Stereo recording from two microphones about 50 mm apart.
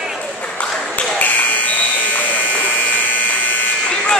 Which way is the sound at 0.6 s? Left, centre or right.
Left.